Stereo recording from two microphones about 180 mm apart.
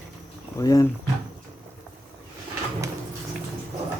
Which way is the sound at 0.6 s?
20° left (ahead or behind).